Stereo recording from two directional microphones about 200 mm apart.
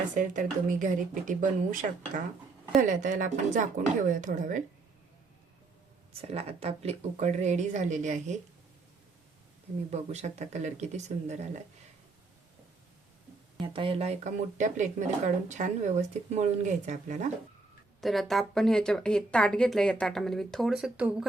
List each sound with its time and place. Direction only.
0.1 s speech: 40° right (ahead or behind)
6.2 s speech: 30° right (ahead or behind)
9.9 s speech: 35° right (ahead or behind)
13.7 s speech: 30° right (ahead or behind)
18.0 s speech: centre (ahead or behind)